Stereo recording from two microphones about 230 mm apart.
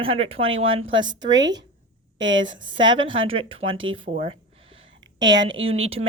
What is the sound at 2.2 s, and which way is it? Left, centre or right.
Speech, right.